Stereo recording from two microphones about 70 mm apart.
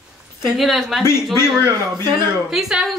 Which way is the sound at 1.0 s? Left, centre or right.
Left.